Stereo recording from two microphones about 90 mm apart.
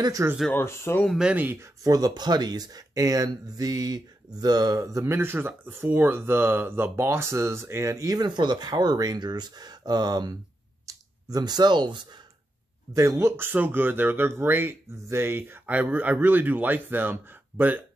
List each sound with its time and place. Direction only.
0.0 s speech: 40° right (ahead or behind)
0.5 s speech: 25° left (ahead or behind)
1.3 s speech: 20° right (ahead or behind)
1.6 s speech: 40° right (ahead or behind)
12.9 s speech: 35° right (ahead or behind); by 17.8 s 20° right (ahead or behind)